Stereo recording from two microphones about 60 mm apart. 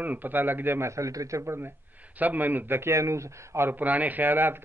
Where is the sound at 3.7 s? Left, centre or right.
Right.